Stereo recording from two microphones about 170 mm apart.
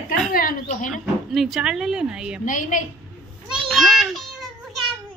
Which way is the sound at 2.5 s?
50° left (ahead or behind).